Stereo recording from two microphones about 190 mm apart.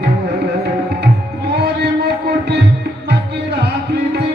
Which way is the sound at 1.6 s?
60° right (ahead or behind).